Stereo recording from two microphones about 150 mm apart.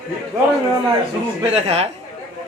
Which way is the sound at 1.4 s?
45° right (ahead or behind).